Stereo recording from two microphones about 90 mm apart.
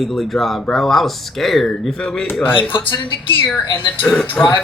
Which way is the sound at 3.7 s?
65° left (ahead or behind).